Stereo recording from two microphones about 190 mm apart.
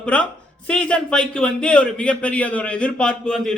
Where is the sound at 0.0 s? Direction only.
5° left (ahead or behind).